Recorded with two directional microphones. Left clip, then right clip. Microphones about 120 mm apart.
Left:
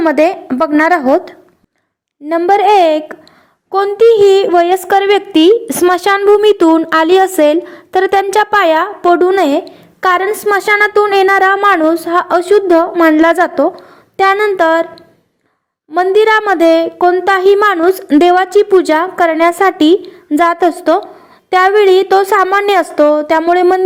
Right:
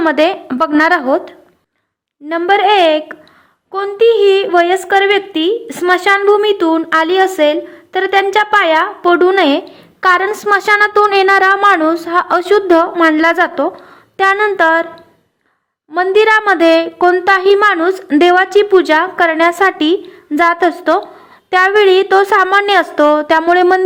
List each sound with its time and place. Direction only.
0.4 s a woman's voice: 15° left (ahead or behind)
0.8 s a woman's voice: 35° left (ahead or behind)
2.6 s a woman's voice: 35° left (ahead or behind); by 6.8 s 60° left (ahead or behind)
6.8 s a woman's voice: 45° left (ahead or behind)
9.6 s a sound: 25° left (ahead or behind)
10.2 s a woman's voice: 15° left (ahead or behind)
16.1 s a woman's voice: 25° left (ahead or behind)